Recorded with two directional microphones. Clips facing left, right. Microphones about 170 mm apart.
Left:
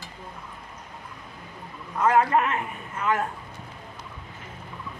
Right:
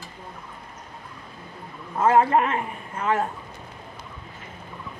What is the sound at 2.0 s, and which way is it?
A man's voice, 30° right (ahead or behind).